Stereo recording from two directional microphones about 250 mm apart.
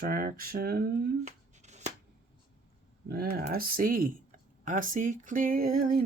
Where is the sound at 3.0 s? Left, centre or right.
Right.